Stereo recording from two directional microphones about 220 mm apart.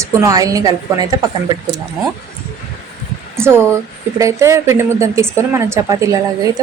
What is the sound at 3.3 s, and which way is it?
A woman's voice, 10° right (ahead or behind).